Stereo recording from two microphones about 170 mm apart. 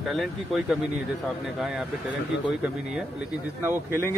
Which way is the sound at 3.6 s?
15° right (ahead or behind).